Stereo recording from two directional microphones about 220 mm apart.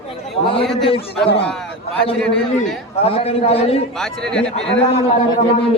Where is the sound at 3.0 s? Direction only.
25° left (ahead or behind).